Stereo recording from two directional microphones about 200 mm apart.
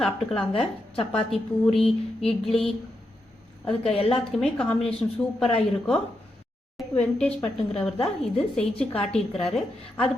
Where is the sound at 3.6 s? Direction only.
30° left (ahead or behind).